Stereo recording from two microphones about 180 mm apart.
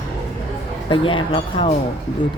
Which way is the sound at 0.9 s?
30° left (ahead or behind).